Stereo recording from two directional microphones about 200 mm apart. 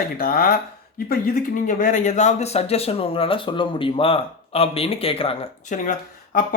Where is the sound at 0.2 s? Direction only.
45° left (ahead or behind).